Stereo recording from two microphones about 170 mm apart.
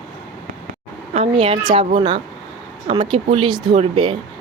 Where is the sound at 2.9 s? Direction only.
35° right (ahead or behind).